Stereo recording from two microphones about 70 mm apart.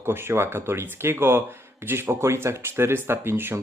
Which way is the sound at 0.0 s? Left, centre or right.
Right.